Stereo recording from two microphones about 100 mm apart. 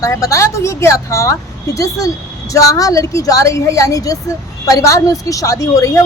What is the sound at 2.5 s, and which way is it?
Speech, 35° left (ahead or behind).